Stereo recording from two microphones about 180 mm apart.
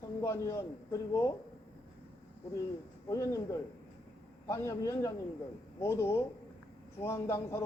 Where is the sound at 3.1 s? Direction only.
15° left (ahead or behind).